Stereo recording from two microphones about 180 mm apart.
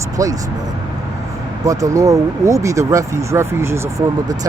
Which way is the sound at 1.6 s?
20° right (ahead or behind).